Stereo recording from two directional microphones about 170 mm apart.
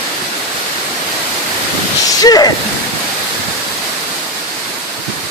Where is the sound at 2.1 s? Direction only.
20° left (ahead or behind).